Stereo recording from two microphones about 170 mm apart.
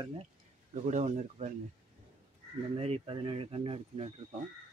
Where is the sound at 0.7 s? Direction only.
45° right (ahead or behind).